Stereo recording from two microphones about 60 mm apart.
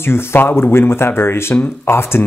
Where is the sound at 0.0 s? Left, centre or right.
Left.